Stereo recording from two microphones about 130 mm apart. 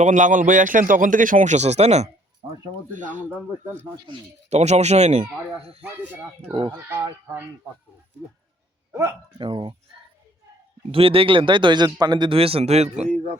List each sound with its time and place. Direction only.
0.0 s a man's voice: 70° right (ahead or behind)
2.9 s speech: 75° right (ahead or behind)
4.4 s speech: 60° right (ahead or behind)
6.5 s speech: 40° right (ahead or behind)
6.8 s speech: 20° right (ahead or behind)
8.9 s speech: 25° right (ahead or behind)
9.4 s speech: 40° right (ahead or behind)
10.9 s speech: 45° right (ahead or behind)